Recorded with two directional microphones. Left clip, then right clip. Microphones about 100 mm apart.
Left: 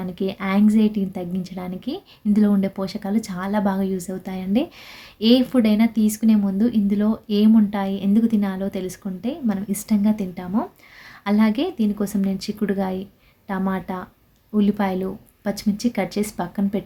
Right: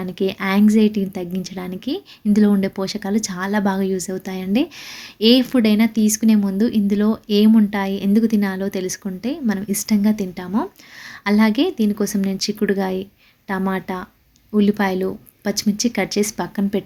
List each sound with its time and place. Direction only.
0.0 s a woman's voice: 30° right (ahead or behind)